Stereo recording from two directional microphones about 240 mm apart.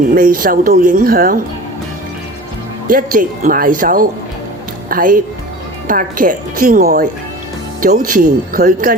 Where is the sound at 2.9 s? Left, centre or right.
Right.